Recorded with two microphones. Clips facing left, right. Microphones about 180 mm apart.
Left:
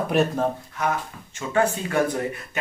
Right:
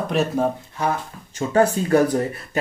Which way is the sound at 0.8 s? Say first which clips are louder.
Right 2 dB; 30° right (ahead or behind).